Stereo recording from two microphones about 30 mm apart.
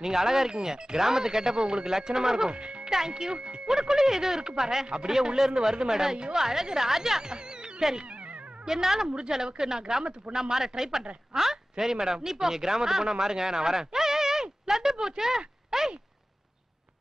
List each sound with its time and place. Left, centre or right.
0.0 s speech: centre
0.5 s speech: right
2.0 s speech: centre
2.5 s speech: right
3.7 s speech: centre
7.3 s music: right
8.0 s music: right
8.6 s speech: centre